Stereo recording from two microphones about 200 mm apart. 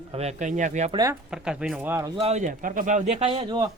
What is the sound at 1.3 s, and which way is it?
Speech, 5° right (ahead or behind).